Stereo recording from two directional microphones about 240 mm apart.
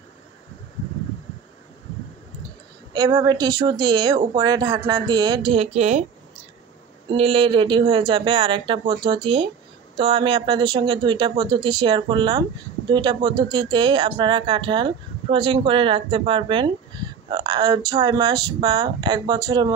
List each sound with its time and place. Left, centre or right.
2.9 s speech: centre
7.1 s speech: right